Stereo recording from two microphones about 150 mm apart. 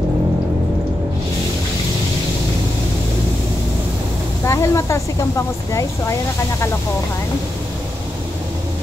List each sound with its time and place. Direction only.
4.5 s speech: 20° left (ahead or behind)